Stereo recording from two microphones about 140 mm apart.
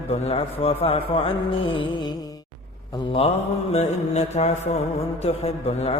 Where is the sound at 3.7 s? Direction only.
50° left (ahead or behind).